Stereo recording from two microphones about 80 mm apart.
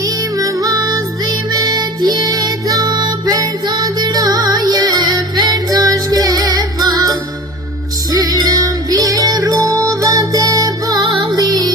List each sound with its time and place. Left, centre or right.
0.0 s music: right
11.2 s music: right